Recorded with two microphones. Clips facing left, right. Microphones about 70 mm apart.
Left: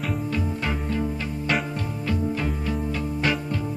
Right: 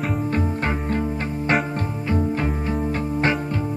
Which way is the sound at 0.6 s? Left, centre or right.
Right.